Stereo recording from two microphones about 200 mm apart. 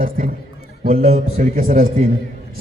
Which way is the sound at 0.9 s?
35° right (ahead or behind).